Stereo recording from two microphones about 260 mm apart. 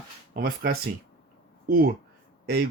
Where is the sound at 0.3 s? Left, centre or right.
Right.